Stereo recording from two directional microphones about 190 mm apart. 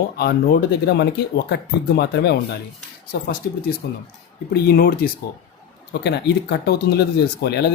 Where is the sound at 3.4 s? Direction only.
60° left (ahead or behind).